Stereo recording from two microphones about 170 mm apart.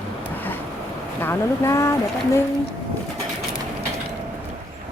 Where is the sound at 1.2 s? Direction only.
15° left (ahead or behind).